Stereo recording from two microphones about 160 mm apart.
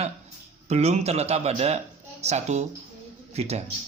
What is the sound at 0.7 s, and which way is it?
Speech, 45° right (ahead or behind).